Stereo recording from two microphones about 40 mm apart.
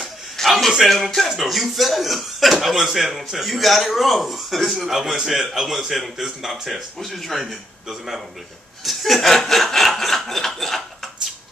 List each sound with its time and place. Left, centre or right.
0.0 s a sound: centre
1.3 s a man's voice: centre
8.8 s snicker: centre